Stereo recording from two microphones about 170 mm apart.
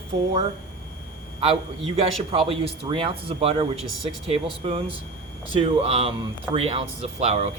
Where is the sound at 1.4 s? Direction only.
35° right (ahead or behind).